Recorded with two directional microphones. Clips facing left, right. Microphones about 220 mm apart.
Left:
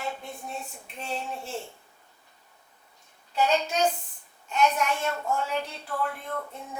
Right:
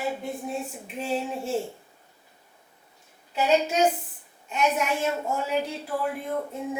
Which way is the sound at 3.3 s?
5° right (ahead or behind).